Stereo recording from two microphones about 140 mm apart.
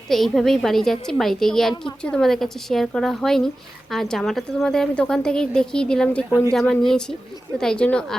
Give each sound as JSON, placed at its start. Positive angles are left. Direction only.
{"t": 0.1, "sound": "a woman's voice", "side_deg": 0}